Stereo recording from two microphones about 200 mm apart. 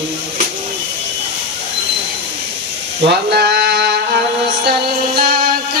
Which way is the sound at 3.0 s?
55° right (ahead or behind).